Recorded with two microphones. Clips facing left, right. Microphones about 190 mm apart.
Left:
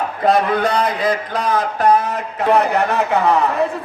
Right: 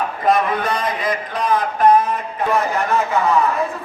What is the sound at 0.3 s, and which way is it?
Speech, 70° left (ahead or behind).